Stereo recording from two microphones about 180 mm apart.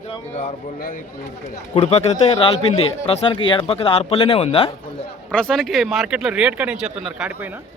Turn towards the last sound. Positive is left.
turn(degrees=-5)  # may be behind; listen again after turning